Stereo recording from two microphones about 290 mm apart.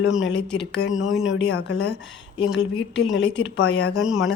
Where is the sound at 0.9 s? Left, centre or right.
Centre.